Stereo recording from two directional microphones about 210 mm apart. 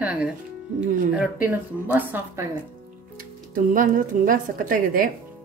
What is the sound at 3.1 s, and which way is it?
Speech, 40° right (ahead or behind).